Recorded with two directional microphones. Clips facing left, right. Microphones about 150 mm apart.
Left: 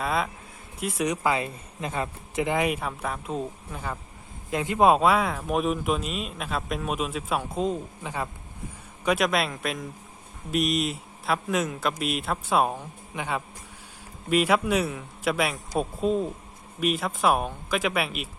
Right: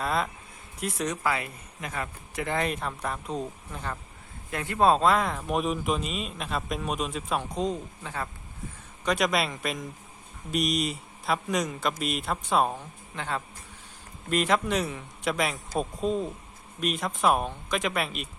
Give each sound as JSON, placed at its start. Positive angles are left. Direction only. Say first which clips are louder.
{"t": 0.0, "sound": "a sound", "louder": "left 1 dB", "side_deg": 0}
{"t": 0.8, "sound": "speech", "louder": "left 3 dB", "side_deg": 5}
{"t": 1.1, "sound": "speech", "louder": "left 3 dB", "side_deg": 20}
{"t": 4.5, "sound": "speech", "louder": "left 3 dB", "side_deg": 15}
{"t": 9.0, "sound": "speech", "louder": "left 2 dB", "side_deg": 0}